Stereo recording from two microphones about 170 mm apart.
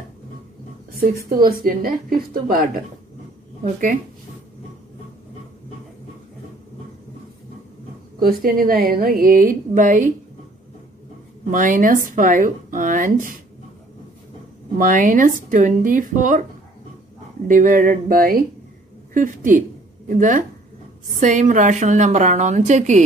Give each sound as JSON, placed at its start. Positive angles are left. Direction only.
{"t": 1.4, "sound": "a woman's voice", "side_deg": -60}
{"t": 8.2, "sound": "a woman's voice", "side_deg": -60}
{"t": 11.5, "sound": "speech", "side_deg": -50}
{"t": 14.8, "sound": "speech", "side_deg": -50}
{"t": 17.5, "sound": "a woman's voice", "side_deg": -50}